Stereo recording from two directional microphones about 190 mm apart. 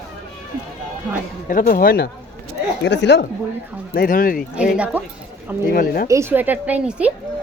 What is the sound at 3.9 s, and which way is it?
Speech, 50° left (ahead or behind).